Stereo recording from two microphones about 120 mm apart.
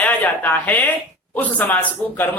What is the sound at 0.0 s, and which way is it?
Speech, 15° left (ahead or behind).